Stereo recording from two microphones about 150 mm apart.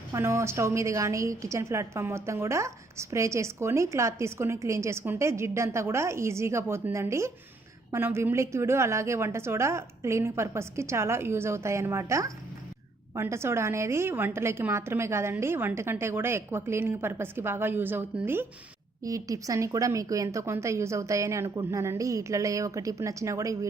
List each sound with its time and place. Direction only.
0.1 s a woman's voice: 20° right (ahead or behind)